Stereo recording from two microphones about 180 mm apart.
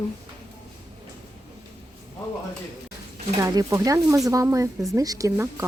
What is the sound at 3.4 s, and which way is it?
Speech, 15° right (ahead or behind).